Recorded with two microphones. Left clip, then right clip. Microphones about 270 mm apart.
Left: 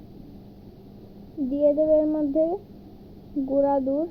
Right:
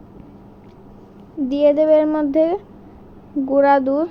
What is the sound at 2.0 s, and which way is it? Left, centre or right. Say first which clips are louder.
Speech: right 6 dB; right.